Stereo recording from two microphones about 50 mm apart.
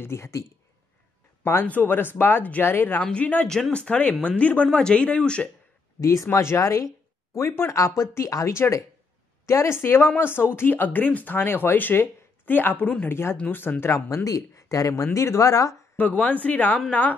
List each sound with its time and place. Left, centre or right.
0.0 s speech: left
1.6 s speech: left
3.1 s speech: left
5.9 s speech: left
6.3 s speech: left
7.3 s speech: left
9.5 s speech: left
9.8 s speech: left
13.1 s speech: left
13.5 s speech: left
13.9 s speech: left
16.0 s speech: left